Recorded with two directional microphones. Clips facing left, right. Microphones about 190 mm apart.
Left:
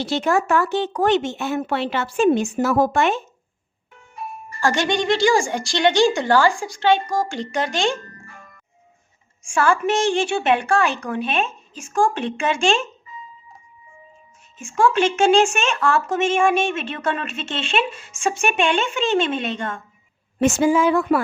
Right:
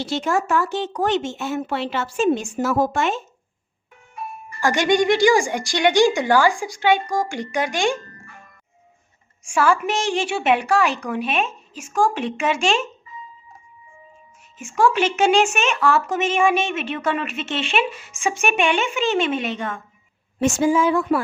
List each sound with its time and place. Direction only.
0.0 s speech: 60° left (ahead or behind)
4.6 s a woman's voice: 15° right (ahead or behind)
9.6 s a woman's voice: 10° right (ahead or behind)
14.8 s a woman's voice: 5° right (ahead or behind)
20.4 s speech: 60° left (ahead or behind)